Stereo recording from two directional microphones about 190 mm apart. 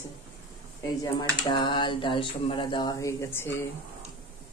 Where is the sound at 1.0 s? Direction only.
20° left (ahead or behind).